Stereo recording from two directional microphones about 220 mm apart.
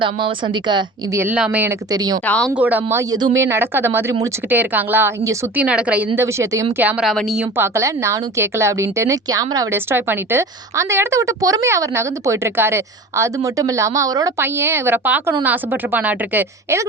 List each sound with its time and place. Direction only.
0.0 s speech: 20° right (ahead or behind)
1.2 s a woman's voice: 5° right (ahead or behind)
2.2 s speech: 5° left (ahead or behind)
2.5 s a woman's voice: 5° right (ahead or behind)
7.5 s a woman's voice: 10° right (ahead or behind)